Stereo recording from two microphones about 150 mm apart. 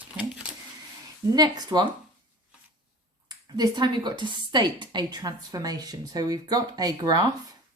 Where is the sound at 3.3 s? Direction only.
30° right (ahead or behind).